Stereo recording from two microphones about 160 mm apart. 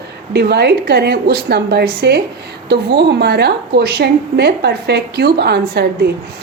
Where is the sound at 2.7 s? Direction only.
90° right.